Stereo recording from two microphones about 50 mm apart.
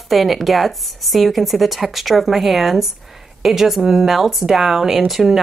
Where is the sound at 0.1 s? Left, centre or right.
Centre.